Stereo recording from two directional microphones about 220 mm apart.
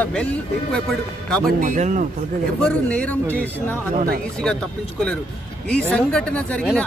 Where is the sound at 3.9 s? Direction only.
40° right (ahead or behind).